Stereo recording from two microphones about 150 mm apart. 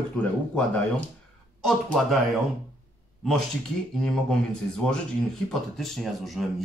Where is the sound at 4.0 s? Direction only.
5° left (ahead or behind).